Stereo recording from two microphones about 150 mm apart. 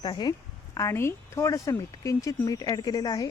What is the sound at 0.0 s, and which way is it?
Speech, 25° left (ahead or behind).